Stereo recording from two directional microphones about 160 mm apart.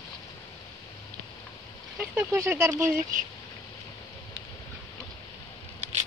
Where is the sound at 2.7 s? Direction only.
55° right (ahead or behind).